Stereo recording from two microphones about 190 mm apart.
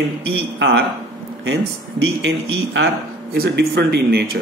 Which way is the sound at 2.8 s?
80° right.